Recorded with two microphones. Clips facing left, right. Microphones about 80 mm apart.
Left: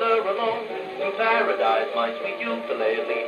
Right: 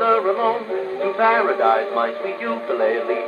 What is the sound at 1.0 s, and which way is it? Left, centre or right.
A man's voice, right.